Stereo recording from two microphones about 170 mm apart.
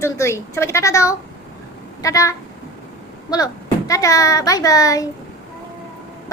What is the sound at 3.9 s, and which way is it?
A child's voice, 20° left (ahead or behind).